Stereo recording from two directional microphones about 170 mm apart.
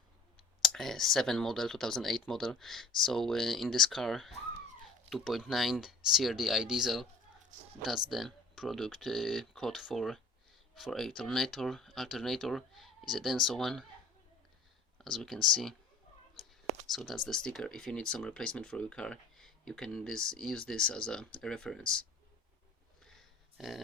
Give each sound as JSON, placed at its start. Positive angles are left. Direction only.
{"t": 0.3, "sound": "speech", "side_deg": 0}
{"t": 14.9, "sound": "speech", "side_deg": 0}
{"t": 16.8, "sound": "speech", "side_deg": 0}
{"t": 23.0, "sound": "a sound", "side_deg": 0}